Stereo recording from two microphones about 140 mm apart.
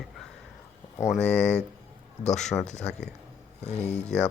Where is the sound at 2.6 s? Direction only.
55° left (ahead or behind).